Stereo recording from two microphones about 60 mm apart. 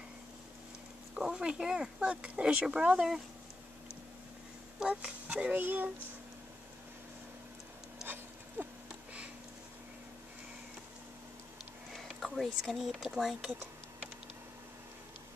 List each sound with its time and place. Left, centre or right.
1.1 s speech: centre
4.7 s speech: centre
8.6 s a sound: right
11.9 s speech: centre